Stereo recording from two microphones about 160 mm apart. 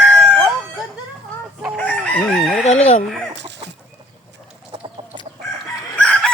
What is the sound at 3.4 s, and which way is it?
Chicken, 90° right.